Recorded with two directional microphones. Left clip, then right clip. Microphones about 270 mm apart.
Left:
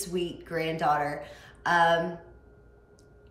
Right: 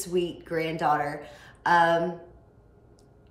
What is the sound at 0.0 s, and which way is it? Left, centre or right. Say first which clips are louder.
Speech: right 4 dB; centre.